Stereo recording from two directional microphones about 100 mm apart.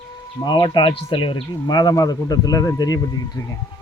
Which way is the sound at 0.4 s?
45° left (ahead or behind).